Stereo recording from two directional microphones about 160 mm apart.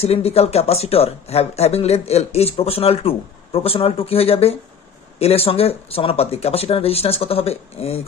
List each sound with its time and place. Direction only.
0.0 s speech: 40° left (ahead or behind)